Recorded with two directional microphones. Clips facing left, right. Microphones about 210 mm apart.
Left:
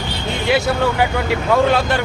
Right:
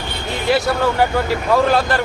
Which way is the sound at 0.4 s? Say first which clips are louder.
Even; centre (ahead or behind).